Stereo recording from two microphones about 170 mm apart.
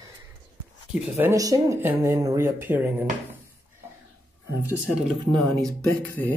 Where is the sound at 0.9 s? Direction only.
15° right (ahead or behind).